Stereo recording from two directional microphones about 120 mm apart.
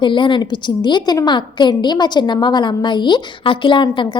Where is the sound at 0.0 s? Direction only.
45° left (ahead or behind).